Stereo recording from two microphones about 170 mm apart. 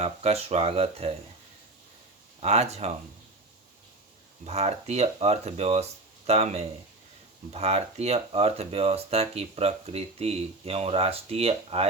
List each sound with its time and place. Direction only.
0.0 s speech: 40° right (ahead or behind)
2.4 s speech: 40° right (ahead or behind)
4.4 s speech: 40° right (ahead or behind)